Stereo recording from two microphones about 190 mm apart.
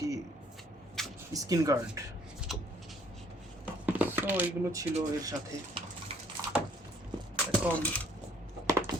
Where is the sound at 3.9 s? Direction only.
10° right (ahead or behind).